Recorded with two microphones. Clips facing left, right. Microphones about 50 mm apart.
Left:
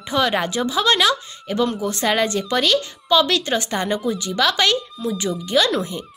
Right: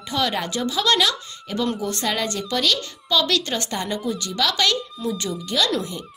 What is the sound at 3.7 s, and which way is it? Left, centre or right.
Speech, left.